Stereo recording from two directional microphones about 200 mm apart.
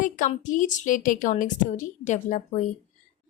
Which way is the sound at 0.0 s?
40° left (ahead or behind).